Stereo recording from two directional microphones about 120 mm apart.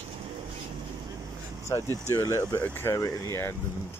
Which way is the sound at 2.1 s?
25° left (ahead or behind).